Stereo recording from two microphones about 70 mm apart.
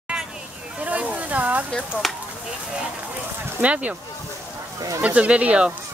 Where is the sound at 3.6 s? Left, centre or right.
Centre.